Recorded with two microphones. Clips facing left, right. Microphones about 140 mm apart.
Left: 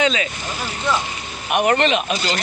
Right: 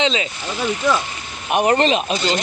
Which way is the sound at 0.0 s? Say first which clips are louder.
Even; 25° right (ahead or behind).